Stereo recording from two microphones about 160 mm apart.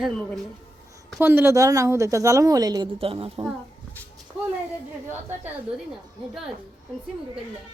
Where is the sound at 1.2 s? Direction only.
15° right (ahead or behind).